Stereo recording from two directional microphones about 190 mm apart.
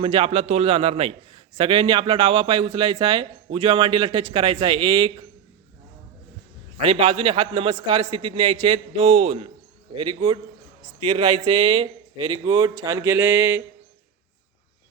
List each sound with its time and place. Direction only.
0.0 s a man's voice: 30° right (ahead or behind)
6.7 s a man's voice: 30° right (ahead or behind); by 13.6 s 10° right (ahead or behind)